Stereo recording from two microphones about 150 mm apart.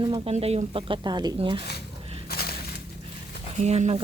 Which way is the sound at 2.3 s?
90° left.